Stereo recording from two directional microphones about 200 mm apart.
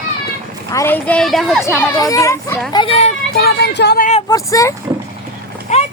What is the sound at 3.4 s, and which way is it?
Speech, 55° left (ahead or behind).